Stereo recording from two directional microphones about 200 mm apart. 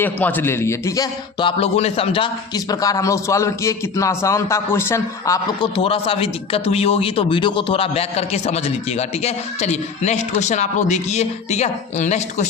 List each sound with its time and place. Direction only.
0.0 s a man's voice: 10° left (ahead or behind); by 12.5 s 35° left (ahead or behind)